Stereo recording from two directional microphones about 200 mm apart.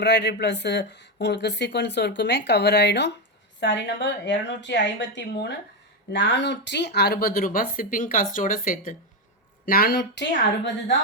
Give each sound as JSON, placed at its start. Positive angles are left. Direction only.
{"t": 0.0, "sound": "speech", "side_deg": 55}